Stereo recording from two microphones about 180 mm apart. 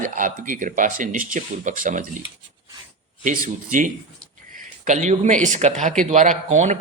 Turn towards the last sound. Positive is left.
turn(degrees=-40)  # may be behind; listen again after turning